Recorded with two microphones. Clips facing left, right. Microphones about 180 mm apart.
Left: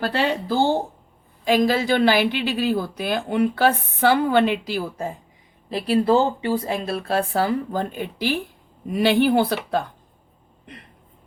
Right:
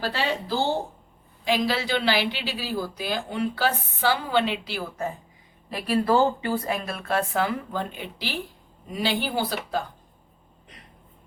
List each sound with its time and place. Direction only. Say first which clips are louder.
0.0 s speech: left 5 dB; 55° left (ahead or behind)
5.7 s speech: left 4 dB; 25° left (ahead or behind); by 8.4 s 50° left (ahead or behind)
8.9 s speech: left 9 dB; 60° left (ahead or behind)